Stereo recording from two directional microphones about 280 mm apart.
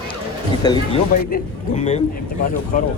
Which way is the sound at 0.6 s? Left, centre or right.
Centre.